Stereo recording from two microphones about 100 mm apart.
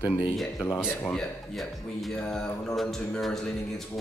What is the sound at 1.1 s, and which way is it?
Speech, 5° left (ahead or behind).